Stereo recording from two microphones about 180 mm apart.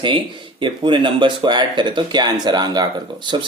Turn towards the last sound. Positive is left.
turn(degrees=-25)  # may be behind; listen again after turning